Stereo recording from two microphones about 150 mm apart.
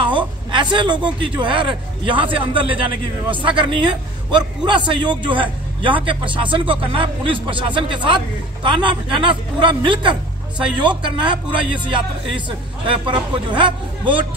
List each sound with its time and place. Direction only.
0.0 s a man's voice: 30° right (ahead or behind)